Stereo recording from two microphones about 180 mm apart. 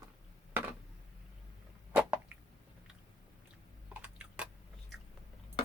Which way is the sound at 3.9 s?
5° right (ahead or behind).